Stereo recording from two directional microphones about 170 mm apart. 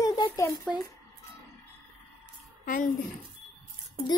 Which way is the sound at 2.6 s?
55° left (ahead or behind).